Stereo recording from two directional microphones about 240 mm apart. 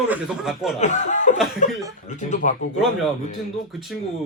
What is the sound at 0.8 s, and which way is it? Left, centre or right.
A man's voice, left.